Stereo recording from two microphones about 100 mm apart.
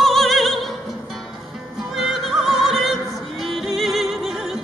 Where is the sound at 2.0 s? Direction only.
Centre (ahead or behind).